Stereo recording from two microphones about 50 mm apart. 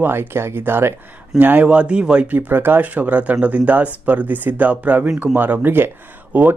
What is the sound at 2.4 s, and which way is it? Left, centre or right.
Speech, right.